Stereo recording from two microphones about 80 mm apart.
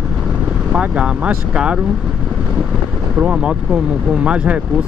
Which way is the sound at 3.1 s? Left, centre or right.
Centre.